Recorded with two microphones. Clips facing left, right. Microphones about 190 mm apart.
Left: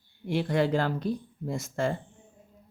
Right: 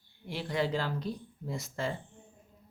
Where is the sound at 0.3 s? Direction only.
55° left (ahead or behind).